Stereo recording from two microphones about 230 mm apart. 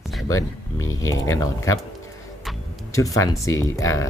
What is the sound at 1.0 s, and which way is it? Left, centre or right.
Speech, centre.